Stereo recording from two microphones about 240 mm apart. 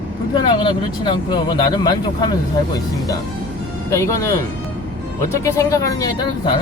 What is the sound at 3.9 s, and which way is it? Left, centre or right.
Speech, centre.